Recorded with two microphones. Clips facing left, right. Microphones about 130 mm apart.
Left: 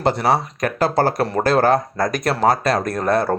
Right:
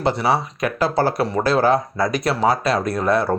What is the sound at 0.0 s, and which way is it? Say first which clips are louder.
Speech: left 1 dB; 45° left (ahead or behind).